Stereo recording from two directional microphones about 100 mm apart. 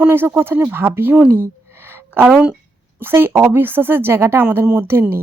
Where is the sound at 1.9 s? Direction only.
20° right (ahead or behind).